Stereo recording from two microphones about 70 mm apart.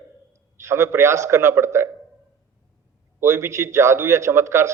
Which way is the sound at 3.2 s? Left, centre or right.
Right.